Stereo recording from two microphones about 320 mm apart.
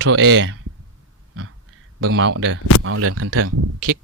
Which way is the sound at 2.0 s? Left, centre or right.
Right.